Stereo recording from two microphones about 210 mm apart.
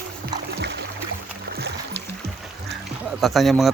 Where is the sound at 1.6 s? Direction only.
55° right (ahead or behind).